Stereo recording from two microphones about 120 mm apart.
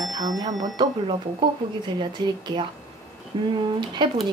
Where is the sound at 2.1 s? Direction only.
40° right (ahead or behind).